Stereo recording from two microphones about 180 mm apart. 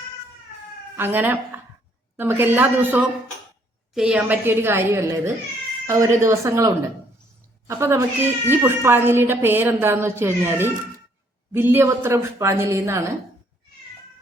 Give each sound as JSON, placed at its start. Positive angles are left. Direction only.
{"t": 0.9, "sound": "a woman's voice", "side_deg": -10}